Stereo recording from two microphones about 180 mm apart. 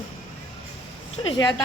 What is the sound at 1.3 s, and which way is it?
Speech, 25° left (ahead or behind).